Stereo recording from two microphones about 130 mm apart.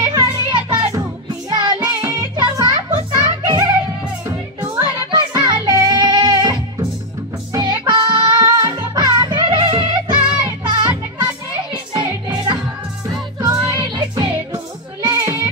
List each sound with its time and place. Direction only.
0.0 s music: 35° right (ahead or behind)
13.4 s music: 30° right (ahead or behind)